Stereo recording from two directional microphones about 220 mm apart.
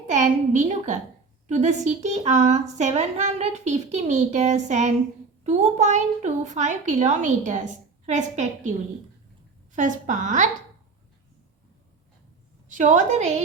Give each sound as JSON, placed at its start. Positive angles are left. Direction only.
{"t": 0.1, "sound": "a woman's voice", "side_deg": -30}
{"t": 9.7, "sound": "a woman's voice", "side_deg": -35}
{"t": 12.7, "sound": "a woman's voice", "side_deg": -35}